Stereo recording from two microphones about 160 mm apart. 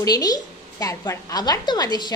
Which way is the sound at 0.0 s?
25° left (ahead or behind).